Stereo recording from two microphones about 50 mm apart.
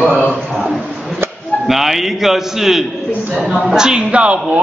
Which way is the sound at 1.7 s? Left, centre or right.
Centre.